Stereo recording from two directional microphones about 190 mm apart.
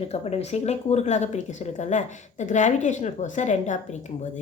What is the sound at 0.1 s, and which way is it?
Speech, 35° left (ahead or behind).